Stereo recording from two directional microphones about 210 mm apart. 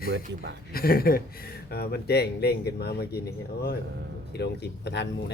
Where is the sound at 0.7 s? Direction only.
45° left (ahead or behind).